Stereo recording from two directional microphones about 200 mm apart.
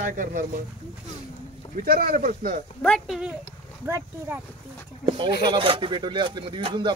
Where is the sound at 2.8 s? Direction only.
Centre (ahead or behind).